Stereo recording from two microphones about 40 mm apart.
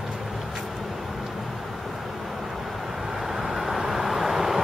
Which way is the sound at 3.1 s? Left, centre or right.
Centre.